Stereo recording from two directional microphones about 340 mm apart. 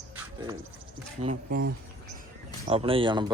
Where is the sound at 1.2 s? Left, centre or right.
Right.